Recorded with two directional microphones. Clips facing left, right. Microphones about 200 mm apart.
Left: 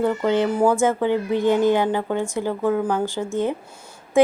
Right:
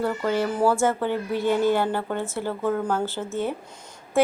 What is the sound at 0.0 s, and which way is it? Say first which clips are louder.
Speech: left 4 dB; 20° left (ahead or behind).